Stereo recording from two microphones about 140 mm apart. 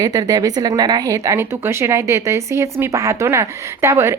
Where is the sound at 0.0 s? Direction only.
30° right (ahead or behind).